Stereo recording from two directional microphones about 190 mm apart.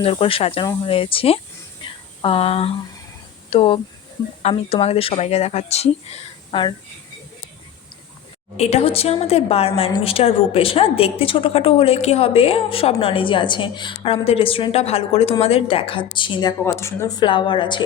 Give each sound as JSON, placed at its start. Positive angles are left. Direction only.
{"t": 0.0, "sound": "a woman's voice", "side_deg": 30}
{"t": 1.8, "sound": "a sound", "side_deg": 30}
{"t": 3.5, "sound": "speech", "side_deg": 30}
{"t": 8.5, "sound": "a woman's voice", "side_deg": 35}